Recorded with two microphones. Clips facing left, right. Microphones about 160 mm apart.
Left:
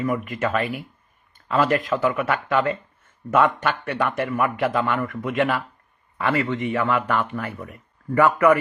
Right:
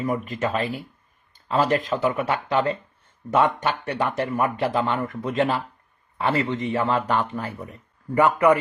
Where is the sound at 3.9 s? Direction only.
20° right (ahead or behind).